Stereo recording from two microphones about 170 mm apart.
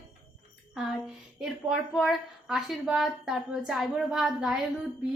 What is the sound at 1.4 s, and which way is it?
A woman's voice, centre (ahead or behind).